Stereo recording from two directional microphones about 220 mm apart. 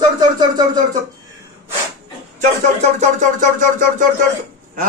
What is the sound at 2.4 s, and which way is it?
Speech, 30° right (ahead or behind).